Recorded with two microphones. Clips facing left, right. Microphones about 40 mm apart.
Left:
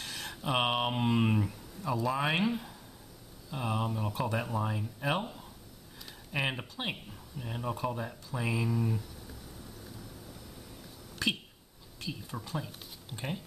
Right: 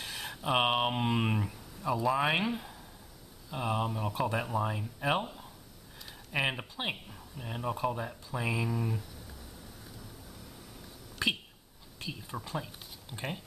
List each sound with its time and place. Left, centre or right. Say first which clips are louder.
0.0 s speech: right 1 dB; centre
11.2 s a sound: right 1 dB; centre
12.0 s speech: even; centre